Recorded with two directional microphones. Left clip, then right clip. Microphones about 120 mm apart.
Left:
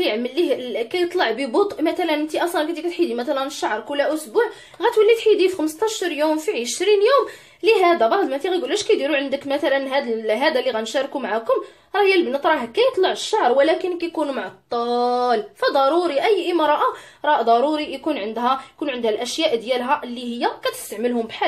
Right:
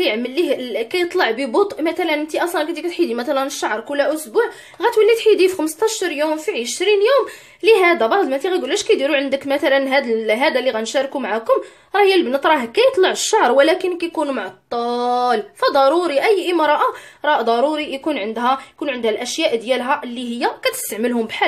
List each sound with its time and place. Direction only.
0.0 s a woman's voice: 20° right (ahead or behind)
7.6 s a woman's voice: 25° right (ahead or behind)
21.0 s speech: 45° right (ahead or behind)